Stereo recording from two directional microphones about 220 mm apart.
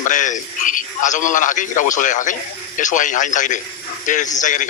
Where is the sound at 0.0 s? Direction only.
35° left (ahead or behind).